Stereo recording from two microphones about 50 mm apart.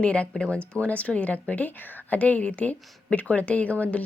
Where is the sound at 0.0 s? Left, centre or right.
Left.